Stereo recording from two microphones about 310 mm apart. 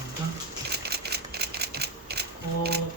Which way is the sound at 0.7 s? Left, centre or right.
Right.